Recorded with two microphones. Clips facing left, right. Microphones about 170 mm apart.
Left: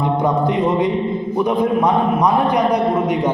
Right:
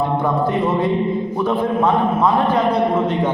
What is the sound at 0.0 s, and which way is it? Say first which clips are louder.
A man's voice: left 1 dB; 15° left (ahead or behind).